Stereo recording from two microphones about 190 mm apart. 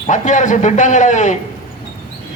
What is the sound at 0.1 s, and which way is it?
A man's voice, 40° left (ahead or behind).